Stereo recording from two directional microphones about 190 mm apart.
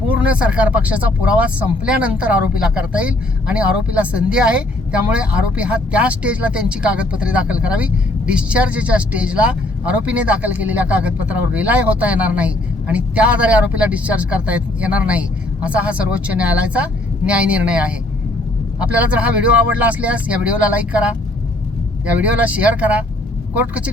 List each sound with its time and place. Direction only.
0.1 s speech: 5° right (ahead or behind)